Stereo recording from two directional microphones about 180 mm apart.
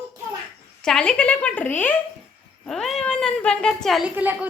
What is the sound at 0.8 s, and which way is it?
Speech, 5° left (ahead or behind).